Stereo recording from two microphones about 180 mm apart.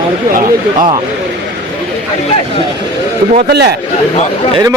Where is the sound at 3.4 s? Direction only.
65° right (ahead or behind).